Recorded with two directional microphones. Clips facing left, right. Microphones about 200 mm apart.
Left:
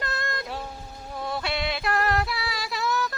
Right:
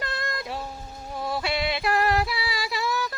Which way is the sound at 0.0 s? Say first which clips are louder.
Even; centre (ahead or behind).